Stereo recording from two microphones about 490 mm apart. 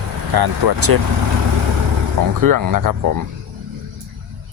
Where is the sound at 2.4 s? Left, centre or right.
Right.